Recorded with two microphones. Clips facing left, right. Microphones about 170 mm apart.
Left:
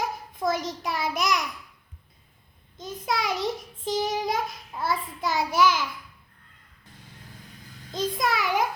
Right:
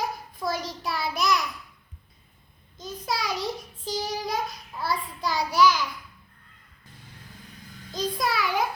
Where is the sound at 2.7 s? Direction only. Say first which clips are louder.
Left 2 dB; 20° left (ahead or behind).